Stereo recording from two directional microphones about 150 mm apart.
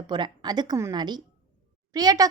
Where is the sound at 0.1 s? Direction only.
30° right (ahead or behind).